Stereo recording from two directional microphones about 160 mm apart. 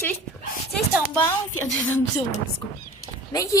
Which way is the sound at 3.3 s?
20° left (ahead or behind).